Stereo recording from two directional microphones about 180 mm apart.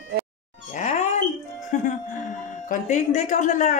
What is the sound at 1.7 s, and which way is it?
Speech, 45° left (ahead or behind).